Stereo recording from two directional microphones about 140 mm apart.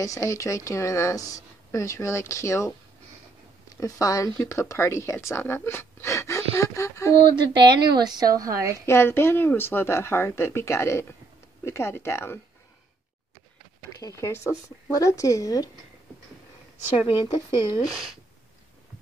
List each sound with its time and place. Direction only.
0.0 s a woman's voice: 25° left (ahead or behind)
7.2 s a woman's voice: 35° right (ahead or behind)
8.8 s a woman's voice: 15° left (ahead or behind)
13.9 s a woman's voice: 20° left (ahead or behind)
17.6 s speech: 30° left (ahead or behind)